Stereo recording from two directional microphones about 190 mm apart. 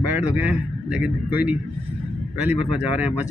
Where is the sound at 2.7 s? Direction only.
5° right (ahead or behind).